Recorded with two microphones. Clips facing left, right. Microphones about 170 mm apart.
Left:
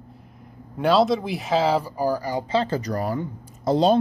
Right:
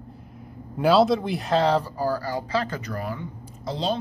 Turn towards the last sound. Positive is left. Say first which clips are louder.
# left 9 dB
turn(degrees=50)  # may be behind; listen again after turning